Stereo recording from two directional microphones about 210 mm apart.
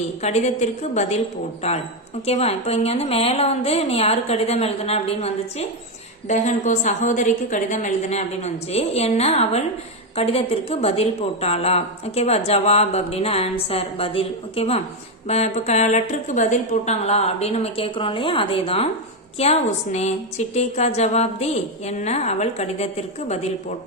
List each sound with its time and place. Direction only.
0.2 s a woman's voice: 35° left (ahead or behind)